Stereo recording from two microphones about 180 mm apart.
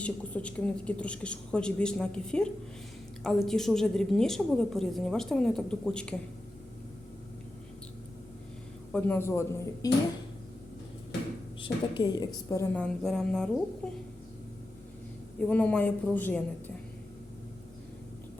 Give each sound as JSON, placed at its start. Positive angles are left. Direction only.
{"t": 0.0, "sound": "a woman's voice", "side_deg": 5}
{"t": 8.9, "sound": "a woman's voice", "side_deg": 10}
{"t": 11.6, "sound": "a woman's voice", "side_deg": 25}
{"t": 12.8, "sound": "a woman's voice", "side_deg": 5}
{"t": 15.4, "sound": "a woman's voice", "side_deg": 5}